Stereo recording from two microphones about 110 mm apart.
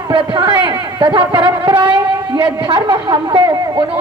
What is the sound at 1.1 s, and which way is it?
A woman's voice, 45° right (ahead or behind).